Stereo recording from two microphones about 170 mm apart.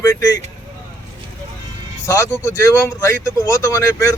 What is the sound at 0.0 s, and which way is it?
Speech, 20° left (ahead or behind).